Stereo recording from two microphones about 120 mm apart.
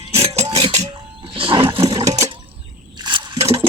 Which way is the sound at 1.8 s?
30° right (ahead or behind).